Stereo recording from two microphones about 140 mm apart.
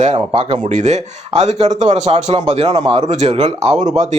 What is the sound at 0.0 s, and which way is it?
Speech, 45° right (ahead or behind).